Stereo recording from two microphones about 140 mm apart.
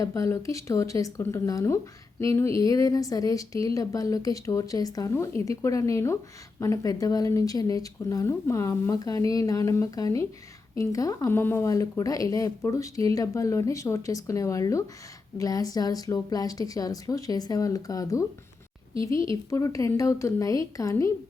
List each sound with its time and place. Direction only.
0.0 s speech: 20° left (ahead or behind)
19.5 s speech: 25° left (ahead or behind)